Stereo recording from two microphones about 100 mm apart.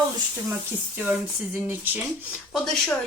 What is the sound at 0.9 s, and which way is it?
Speech, 20° right (ahead or behind).